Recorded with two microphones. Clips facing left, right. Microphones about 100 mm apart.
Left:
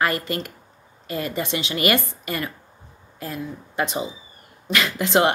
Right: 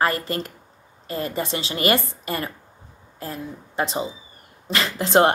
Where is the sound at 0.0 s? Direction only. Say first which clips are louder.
Right 1 dB; 35° right (ahead or behind).